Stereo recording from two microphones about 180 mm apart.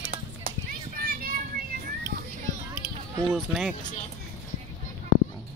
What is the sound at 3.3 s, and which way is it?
Speech, centre (ahead or behind).